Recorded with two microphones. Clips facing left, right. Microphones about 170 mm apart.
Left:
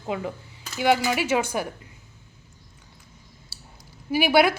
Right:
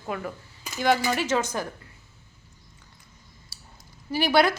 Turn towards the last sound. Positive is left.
turn(degrees=10)  # may be behind; listen again after turning